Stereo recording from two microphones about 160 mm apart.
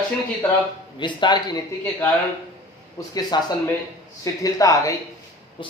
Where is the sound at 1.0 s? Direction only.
30° left (ahead or behind).